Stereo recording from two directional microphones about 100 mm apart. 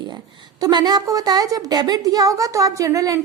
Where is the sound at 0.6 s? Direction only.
45° right (ahead or behind).